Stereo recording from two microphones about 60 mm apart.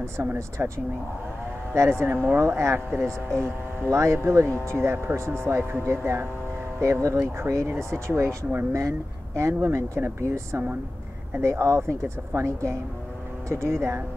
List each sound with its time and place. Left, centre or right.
0.2 s speech: right
0.6 s speech: right
1.7 s speech: right
3.9 s speech: right
7.3 s speech: right
8.7 s speech: right
11.4 s speech: right